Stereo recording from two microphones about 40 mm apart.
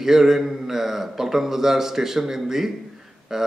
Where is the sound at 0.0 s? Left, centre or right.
Centre.